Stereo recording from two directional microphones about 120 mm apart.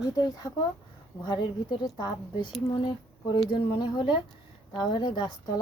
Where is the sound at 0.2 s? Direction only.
30° left (ahead or behind).